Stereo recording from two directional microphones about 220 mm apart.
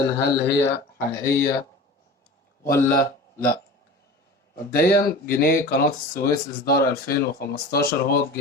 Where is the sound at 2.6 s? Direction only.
10° left (ahead or behind).